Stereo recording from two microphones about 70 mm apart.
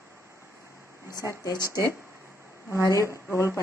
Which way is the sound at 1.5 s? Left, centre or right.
Right.